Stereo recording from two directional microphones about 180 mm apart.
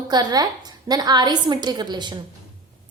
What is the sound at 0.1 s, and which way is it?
A woman's voice, 20° right (ahead or behind).